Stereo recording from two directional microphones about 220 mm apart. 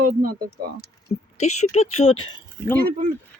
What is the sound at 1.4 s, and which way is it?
Speech, 30° left (ahead or behind).